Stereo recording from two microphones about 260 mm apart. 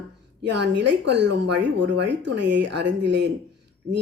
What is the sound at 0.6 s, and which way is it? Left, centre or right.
Speech, right.